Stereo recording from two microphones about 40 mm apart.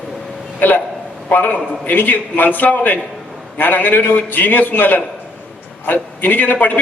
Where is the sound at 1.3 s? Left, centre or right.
Left.